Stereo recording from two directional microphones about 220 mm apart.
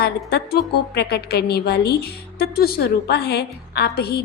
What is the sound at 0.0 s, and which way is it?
A woman's voice, 45° left (ahead or behind).